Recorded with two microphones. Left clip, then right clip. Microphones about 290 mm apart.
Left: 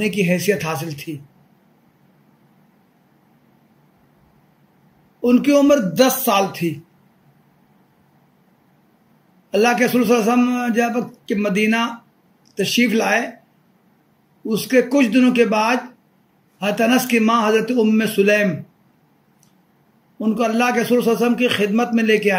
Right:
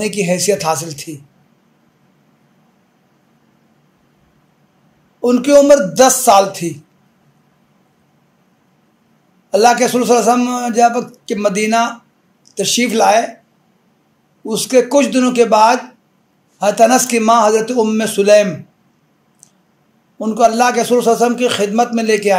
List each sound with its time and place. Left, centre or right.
0.0 s speech: centre
5.2 s speech: centre
9.5 s speech: centre
14.5 s speech: centre
20.2 s speech: centre